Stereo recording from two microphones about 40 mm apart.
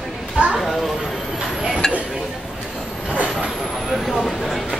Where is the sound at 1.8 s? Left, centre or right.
Centre.